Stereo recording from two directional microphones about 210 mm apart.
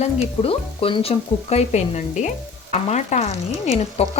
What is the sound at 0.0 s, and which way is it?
Speech, 25° left (ahead or behind).